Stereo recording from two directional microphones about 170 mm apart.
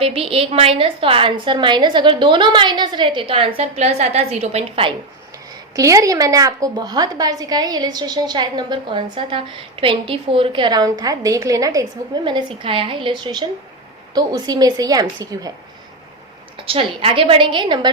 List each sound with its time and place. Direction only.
0.0 s a woman's voice: 35° right (ahead or behind)
5.7 s a woman's voice: 20° right (ahead or behind)
16.6 s a woman's voice: 30° right (ahead or behind)